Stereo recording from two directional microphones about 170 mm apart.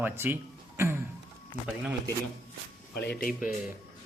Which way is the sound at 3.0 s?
65° left (ahead or behind).